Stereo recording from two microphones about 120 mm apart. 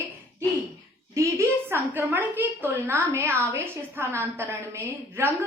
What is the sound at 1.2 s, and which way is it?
A woman's voice, 20° right (ahead or behind).